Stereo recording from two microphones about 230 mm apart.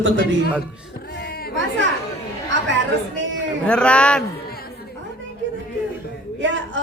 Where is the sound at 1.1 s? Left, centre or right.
Left.